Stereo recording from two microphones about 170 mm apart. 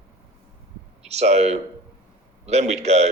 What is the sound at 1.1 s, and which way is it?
A man's voice, 40° right (ahead or behind).